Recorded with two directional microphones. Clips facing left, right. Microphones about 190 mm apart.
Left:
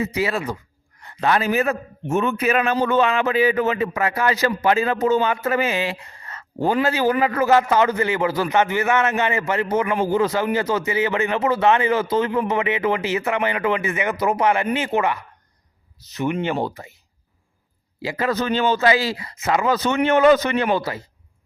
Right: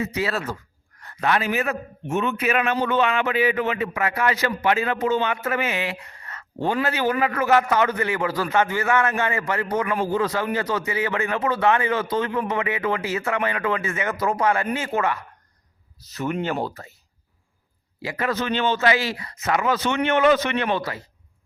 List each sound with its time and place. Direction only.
0.0 s a man's voice: 25° left (ahead or behind)
0.3 s speech: 15° left (ahead or behind)
1.0 s a sound: 25° left (ahead or behind)
1.3 s a man's voice: 35° left (ahead or behind); by 15.2 s 15° left (ahead or behind)
16.6 s speech: 15° left (ahead or behind)
18.0 s a man's voice: 25° left (ahead or behind)
18.3 s a man's voice: 40° left (ahead or behind)
20.7 s a man's voice: 25° left (ahead or behind)